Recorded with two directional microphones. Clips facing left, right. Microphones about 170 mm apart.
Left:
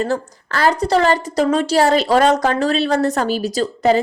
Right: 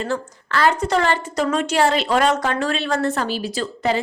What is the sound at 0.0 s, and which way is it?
A woman's voice, 40° left (ahead or behind).